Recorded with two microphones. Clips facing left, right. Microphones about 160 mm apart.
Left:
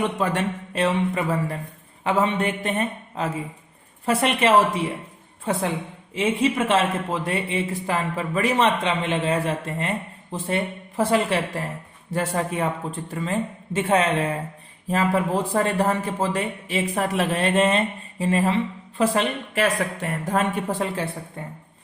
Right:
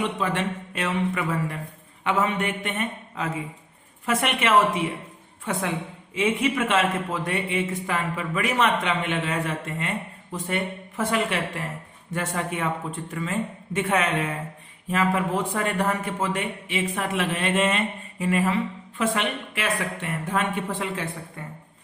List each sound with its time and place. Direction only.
0.0 s speech: 45° left (ahead or behind)
13.7 s speech: 30° left (ahead or behind)